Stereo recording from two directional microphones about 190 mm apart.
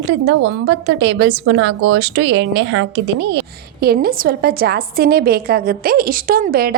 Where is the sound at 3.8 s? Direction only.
55° right (ahead or behind).